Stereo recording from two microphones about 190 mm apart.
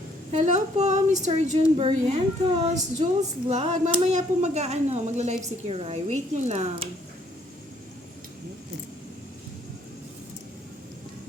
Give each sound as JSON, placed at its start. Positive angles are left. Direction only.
{"t": 0.3, "sound": "a woman's voice", "side_deg": -35}